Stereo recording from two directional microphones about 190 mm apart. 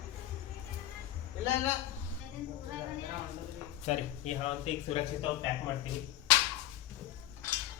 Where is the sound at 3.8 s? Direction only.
35° left (ahead or behind).